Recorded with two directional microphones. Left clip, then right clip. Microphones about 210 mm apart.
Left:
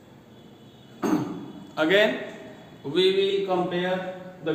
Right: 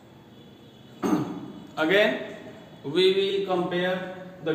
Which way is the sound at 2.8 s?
Centre (ahead or behind).